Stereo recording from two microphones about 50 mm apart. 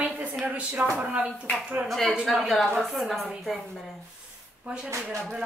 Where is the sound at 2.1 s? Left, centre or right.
Centre.